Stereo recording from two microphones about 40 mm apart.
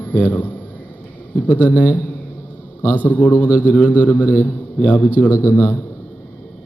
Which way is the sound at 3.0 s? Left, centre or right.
Left.